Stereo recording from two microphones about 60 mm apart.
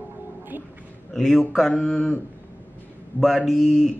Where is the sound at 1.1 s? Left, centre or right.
Centre.